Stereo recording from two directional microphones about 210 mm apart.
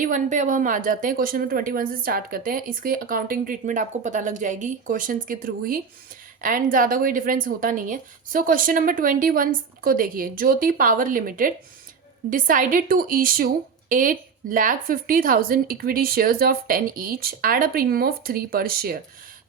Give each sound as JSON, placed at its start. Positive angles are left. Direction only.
{"t": 0.0, "sound": "a woman's voice", "side_deg": -35}